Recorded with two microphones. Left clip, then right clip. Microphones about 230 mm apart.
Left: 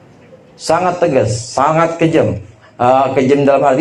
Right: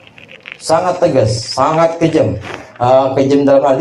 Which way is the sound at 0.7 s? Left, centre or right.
Left.